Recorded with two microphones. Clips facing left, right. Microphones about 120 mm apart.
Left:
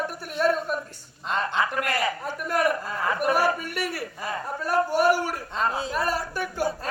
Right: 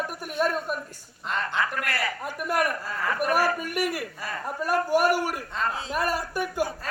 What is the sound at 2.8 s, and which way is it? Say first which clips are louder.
Speech: left 2 dB; 20° left (ahead or behind).